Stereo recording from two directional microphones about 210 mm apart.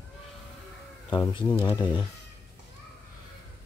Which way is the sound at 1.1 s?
25° left (ahead or behind).